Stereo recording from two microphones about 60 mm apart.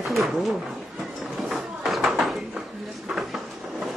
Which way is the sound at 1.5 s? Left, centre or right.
Centre.